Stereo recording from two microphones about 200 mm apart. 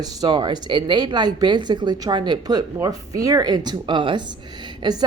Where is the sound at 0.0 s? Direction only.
20° right (ahead or behind).